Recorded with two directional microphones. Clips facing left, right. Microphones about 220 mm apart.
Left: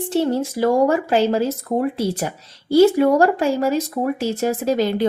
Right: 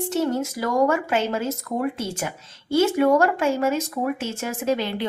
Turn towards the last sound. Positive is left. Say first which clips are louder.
# left 5 dB
turn(degrees=40)  # may be behind; listen again after turning